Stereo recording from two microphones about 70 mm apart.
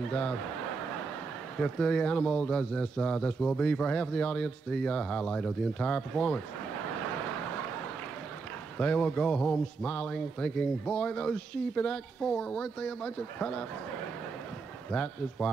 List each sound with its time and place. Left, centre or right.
0.1 s a man's voice: centre
1.6 s a man's voice: centre
8.7 s a man's voice: centre
14.9 s a man's voice: centre